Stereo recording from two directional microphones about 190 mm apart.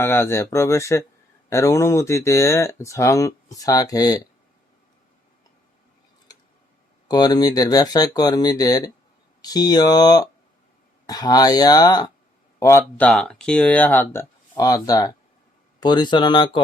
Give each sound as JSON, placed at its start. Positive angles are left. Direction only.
{"t": 0.0, "sound": "speech", "side_deg": 10}
{"t": 7.1, "sound": "speech", "side_deg": 20}
{"t": 13.1, "sound": "speech", "side_deg": 5}